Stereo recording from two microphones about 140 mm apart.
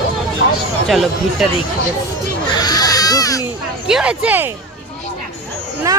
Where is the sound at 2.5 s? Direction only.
30° left (ahead or behind).